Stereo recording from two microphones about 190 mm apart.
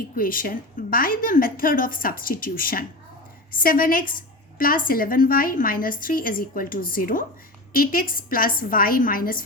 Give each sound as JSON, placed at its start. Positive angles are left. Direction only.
{"t": 0.2, "sound": "a woman's voice", "side_deg": 50}